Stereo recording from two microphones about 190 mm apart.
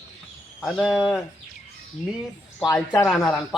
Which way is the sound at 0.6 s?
Centre (ahead or behind).